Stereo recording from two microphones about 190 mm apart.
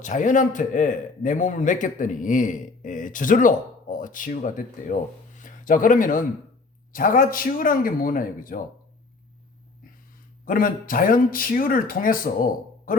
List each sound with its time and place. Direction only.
0.0 s a man's voice: 40° left (ahead or behind)
10.4 s a man's voice: 45° left (ahead or behind)